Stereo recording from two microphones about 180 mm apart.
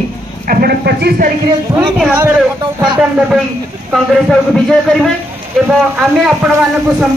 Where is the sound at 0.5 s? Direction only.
60° right (ahead or behind).